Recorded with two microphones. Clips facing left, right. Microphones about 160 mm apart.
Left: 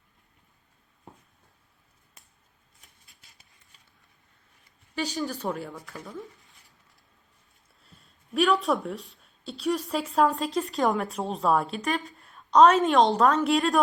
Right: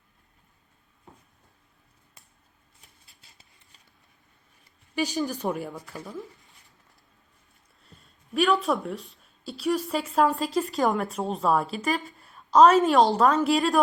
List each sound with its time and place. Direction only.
3.1 s a sound: 30° right (ahead or behind)
4.9 s speech: 15° right (ahead or behind)
7.9 s a woman's voice: centre (ahead or behind)